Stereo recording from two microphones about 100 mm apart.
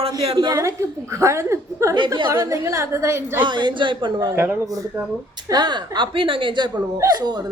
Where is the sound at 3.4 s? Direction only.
50° right (ahead or behind).